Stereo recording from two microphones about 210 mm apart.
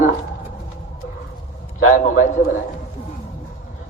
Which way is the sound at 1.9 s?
40° left (ahead or behind).